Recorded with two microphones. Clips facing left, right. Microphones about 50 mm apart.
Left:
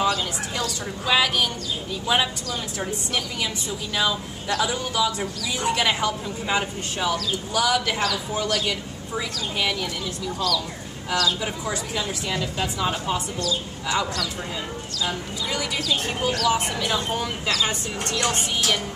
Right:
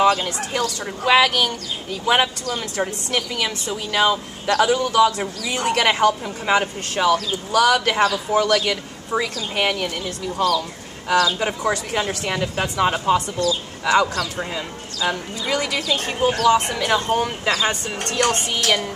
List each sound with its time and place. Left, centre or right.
0.0 s speech: right
7.9 s speech: right
8.3 s speech: right
10.3 s speech: right
11.6 s speech: right
13.4 s speech: right
15.8 s speech: right